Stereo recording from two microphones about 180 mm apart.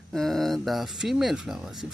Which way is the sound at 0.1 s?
Centre (ahead or behind).